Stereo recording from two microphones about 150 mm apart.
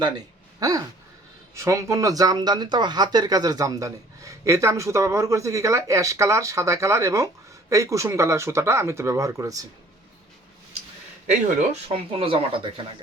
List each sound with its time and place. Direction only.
0.6 s speech: 25° right (ahead or behind)
11.9 s speech: 35° right (ahead or behind)